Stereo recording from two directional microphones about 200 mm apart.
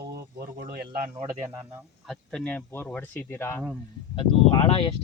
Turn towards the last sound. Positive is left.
turn(degrees=25)  # may be behind; listen again after turning